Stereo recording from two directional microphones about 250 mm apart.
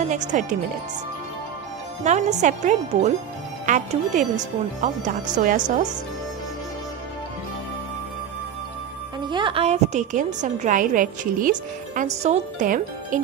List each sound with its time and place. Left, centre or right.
0.1 s a woman's voice: right
2.0 s a woman's voice: right
9.3 s a woman's voice: centre